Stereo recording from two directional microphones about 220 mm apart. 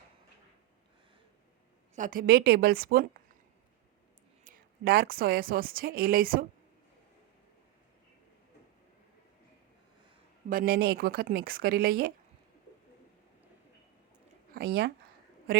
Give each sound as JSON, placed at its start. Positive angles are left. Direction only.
{"t": 2.0, "sound": "speech", "side_deg": -40}
{"t": 4.4, "sound": "a woman's voice", "side_deg": -40}
{"t": 10.5, "sound": "speech", "side_deg": -40}
{"t": 14.5, "sound": "speech", "side_deg": -45}